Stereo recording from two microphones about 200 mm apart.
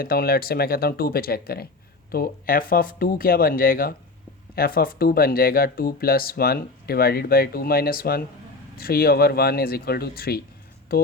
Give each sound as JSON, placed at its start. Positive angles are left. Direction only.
{"t": 0.0, "sound": "speech", "side_deg": 50}